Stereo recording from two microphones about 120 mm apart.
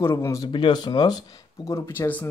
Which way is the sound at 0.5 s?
40° left (ahead or behind).